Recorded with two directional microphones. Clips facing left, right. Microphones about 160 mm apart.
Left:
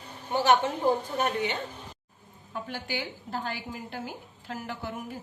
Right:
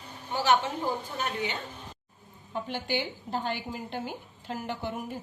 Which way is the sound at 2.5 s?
20° right (ahead or behind).